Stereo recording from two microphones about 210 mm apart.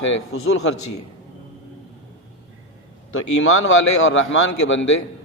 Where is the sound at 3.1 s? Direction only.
75° left (ahead or behind).